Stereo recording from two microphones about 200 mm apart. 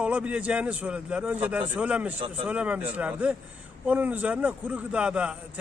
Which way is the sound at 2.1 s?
25° right (ahead or behind).